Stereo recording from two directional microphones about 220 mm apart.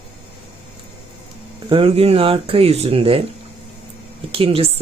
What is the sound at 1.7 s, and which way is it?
Speech, 25° right (ahead or behind).